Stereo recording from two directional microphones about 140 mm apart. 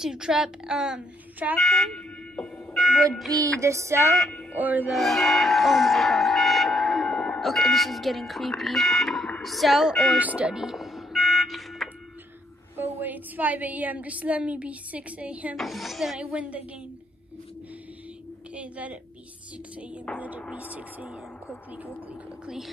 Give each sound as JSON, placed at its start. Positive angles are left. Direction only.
{"t": 0.0, "sound": "a woman's voice", "side_deg": -5}
{"t": 1.6, "sound": "a sound", "side_deg": 0}
{"t": 3.3, "sound": "music", "side_deg": -20}
{"t": 4.2, "sound": "speech", "side_deg": 10}
{"t": 4.6, "sound": "speech", "side_deg": -10}
{"t": 4.9, "sound": "speech", "side_deg": 0}
{"t": 10.1, "sound": "music", "side_deg": -10}
{"t": 12.7, "sound": "a woman's voice", "side_deg": -15}
{"t": 18.5, "sound": "a woman's voice", "side_deg": -10}
{"t": 20.1, "sound": "a woman's voice", "side_deg": 5}
{"t": 20.7, "sound": "speech", "side_deg": -10}